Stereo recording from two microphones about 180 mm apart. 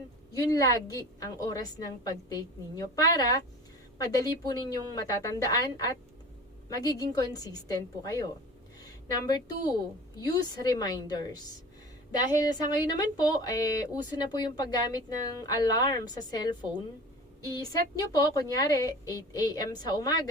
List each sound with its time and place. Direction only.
0.5 s speech: 20° left (ahead or behind)
9.2 s speech: 20° left (ahead or behind)
12.4 s speech: 20° left (ahead or behind)